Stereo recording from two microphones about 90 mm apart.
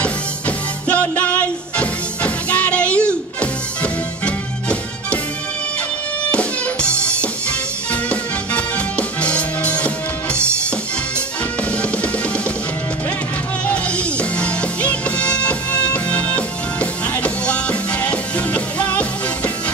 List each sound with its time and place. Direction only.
0.0 s music: 15° left (ahead or behind)
6.3 s music: 10° left (ahead or behind)
13.7 s music: 15° left (ahead or behind)